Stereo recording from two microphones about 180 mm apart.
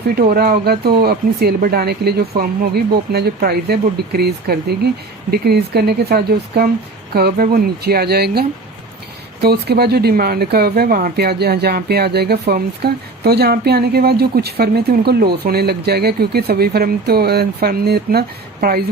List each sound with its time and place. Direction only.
0.2 s speech: 60° right (ahead or behind)